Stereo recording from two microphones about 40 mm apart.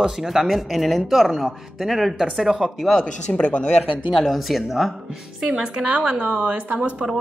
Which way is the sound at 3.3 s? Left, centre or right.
Left.